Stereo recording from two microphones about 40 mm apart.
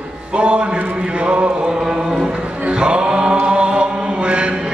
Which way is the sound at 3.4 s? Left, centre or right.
Right.